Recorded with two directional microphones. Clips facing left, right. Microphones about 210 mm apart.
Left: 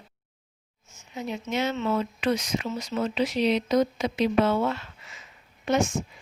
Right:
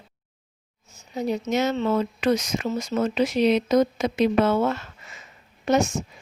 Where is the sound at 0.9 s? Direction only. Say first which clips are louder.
Right 7 dB; 35° right (ahead or behind).